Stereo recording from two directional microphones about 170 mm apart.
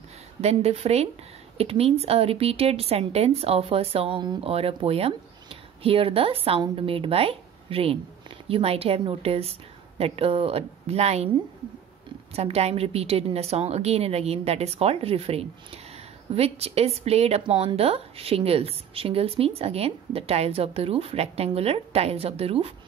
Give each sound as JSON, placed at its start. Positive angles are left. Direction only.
{"t": 0.4, "sound": "a woman's voice", "side_deg": -40}
{"t": 12.4, "sound": "a woman's voice", "side_deg": -35}